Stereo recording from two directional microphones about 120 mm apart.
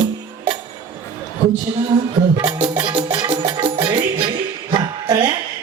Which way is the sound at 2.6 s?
40° right (ahead or behind).